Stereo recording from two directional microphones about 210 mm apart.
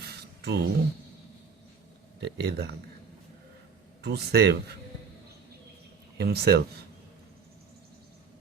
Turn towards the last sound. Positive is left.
turn(degrees=-50)  # may be behind; listen again after turning